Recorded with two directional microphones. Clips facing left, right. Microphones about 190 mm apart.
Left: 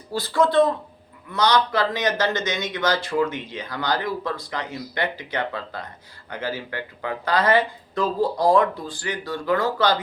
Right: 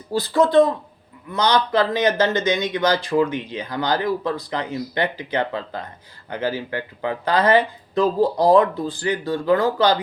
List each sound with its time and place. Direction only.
0.1 s speech: 15° right (ahead or behind)